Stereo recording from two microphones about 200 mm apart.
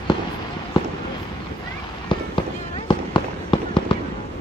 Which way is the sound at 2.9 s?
25° left (ahead or behind).